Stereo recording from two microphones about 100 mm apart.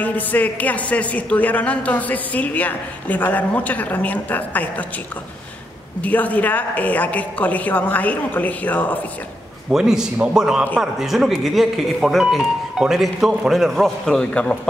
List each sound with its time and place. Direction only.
0.0 s speech: 15° left (ahead or behind)
5.9 s speech: 15° left (ahead or behind)
9.7 s a man's voice: 5° right (ahead or behind); by 14.6 s 10° left (ahead or behind)